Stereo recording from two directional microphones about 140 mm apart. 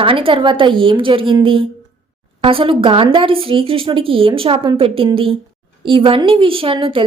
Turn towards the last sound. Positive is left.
turn(degrees=-40)  # may be behind; listen again after turning